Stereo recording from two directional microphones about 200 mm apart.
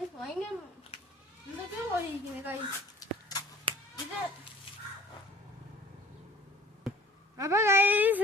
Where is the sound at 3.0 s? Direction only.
20° left (ahead or behind).